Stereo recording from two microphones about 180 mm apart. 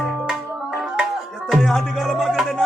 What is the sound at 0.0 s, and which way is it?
Music, 5° right (ahead or behind).